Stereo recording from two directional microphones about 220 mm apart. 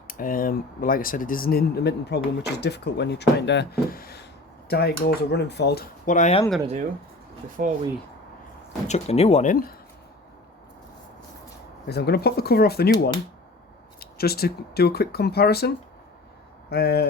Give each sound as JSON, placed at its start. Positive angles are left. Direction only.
{"t": 0.1, "sound": "speech", "side_deg": 40}
{"t": 7.6, "sound": "speech", "side_deg": -35}
{"t": 8.9, "sound": "speech", "side_deg": 30}
{"t": 11.9, "sound": "speech", "side_deg": 50}